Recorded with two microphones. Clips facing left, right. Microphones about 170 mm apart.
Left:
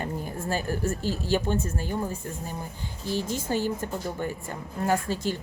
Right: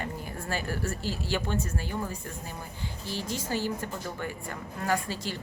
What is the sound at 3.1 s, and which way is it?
Speech, 50° left (ahead or behind).